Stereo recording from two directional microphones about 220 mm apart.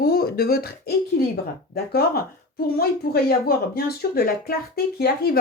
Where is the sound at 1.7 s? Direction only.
45° left (ahead or behind).